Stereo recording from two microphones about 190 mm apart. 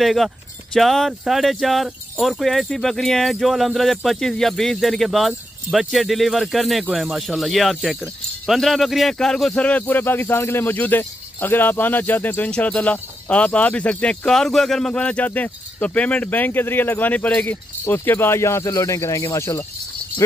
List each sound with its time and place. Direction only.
0.0 s speech: centre (ahead or behind); by 19.6 s 15° left (ahead or behind)